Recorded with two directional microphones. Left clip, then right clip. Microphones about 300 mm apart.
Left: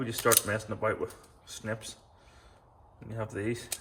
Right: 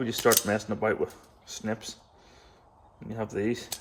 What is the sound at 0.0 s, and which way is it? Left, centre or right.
Speech, right.